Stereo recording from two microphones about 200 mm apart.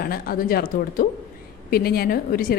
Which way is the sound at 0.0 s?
50° left (ahead or behind).